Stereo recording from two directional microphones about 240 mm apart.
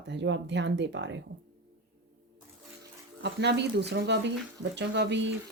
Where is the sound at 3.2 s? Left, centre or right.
Right.